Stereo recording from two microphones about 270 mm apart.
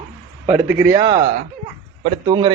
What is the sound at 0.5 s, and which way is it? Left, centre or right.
Speech, centre.